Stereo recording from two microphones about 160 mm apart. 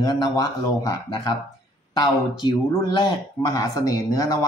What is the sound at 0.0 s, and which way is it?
Speech, 25° left (ahead or behind).